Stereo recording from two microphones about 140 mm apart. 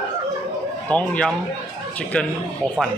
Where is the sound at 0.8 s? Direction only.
10° left (ahead or behind).